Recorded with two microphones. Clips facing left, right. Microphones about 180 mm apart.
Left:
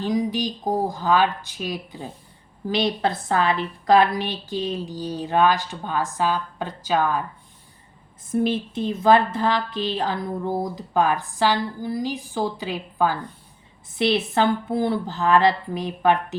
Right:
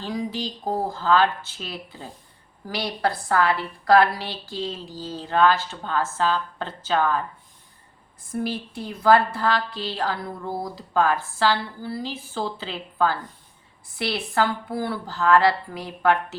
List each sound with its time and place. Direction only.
0.0 s a woman's voice: 15° left (ahead or behind)
8.3 s a woman's voice: 20° left (ahead or behind)